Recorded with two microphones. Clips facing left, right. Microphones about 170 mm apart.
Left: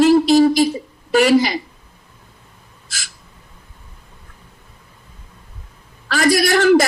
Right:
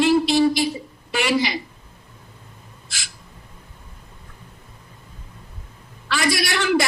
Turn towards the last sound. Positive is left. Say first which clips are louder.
# left 8 dB
turn(degrees=40)  # may be behind; listen again after turning